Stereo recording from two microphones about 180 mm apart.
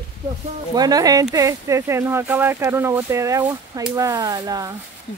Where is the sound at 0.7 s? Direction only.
20° right (ahead or behind).